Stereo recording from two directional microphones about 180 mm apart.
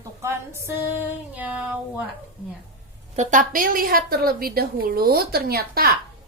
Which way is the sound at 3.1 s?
40° right (ahead or behind).